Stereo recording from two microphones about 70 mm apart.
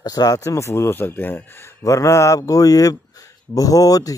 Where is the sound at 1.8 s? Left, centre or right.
Left.